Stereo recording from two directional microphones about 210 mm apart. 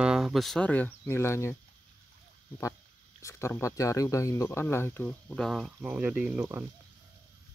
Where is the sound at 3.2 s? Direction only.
15° left (ahead or behind); by 6.6 s 10° right (ahead or behind).